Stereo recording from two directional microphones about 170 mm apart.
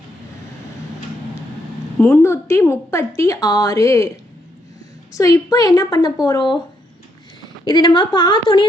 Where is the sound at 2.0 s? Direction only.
15° left (ahead or behind).